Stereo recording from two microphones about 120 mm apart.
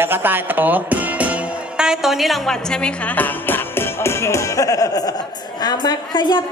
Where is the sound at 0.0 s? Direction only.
15° right (ahead or behind).